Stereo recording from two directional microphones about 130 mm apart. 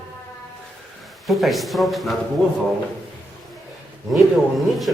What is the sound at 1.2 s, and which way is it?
Speech, centre (ahead or behind).